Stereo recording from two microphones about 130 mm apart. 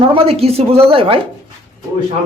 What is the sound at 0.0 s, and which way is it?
Speech, 45° right (ahead or behind).